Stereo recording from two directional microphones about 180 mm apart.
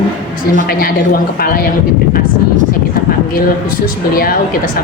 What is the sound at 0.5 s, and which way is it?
A woman's voice, 55° left (ahead or behind).